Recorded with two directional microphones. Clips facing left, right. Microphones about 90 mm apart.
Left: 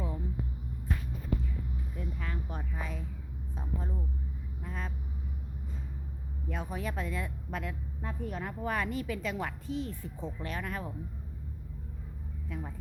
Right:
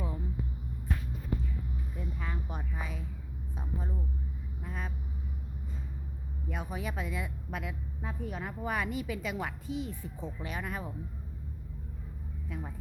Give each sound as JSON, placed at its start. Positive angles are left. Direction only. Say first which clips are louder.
{"t": 2.0, "sound": "a sound", "louder": "even", "side_deg": -15}
{"t": 4.6, "sound": "a woman's voice", "louder": "even", "side_deg": -10}
{"t": 6.5, "sound": "a woman's voice", "louder": "left 1 dB", "side_deg": -10}
{"t": 12.5, "sound": "a woman's voice", "louder": "left 1 dB", "side_deg": -10}